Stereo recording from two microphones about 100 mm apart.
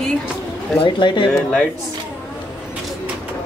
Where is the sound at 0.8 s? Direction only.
55° left (ahead or behind).